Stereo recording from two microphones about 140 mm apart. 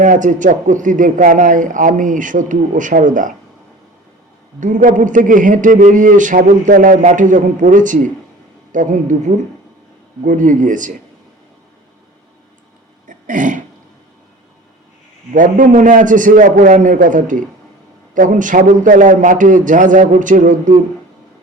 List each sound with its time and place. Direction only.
0.0 s a man's voice: 65° right (ahead or behind)
4.6 s a man's voice: 70° right (ahead or behind)
13.1 s throat clearing: 65° right (ahead or behind)
15.3 s a man's voice: 75° right (ahead or behind)